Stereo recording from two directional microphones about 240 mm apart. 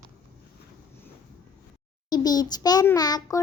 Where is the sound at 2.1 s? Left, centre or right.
Centre.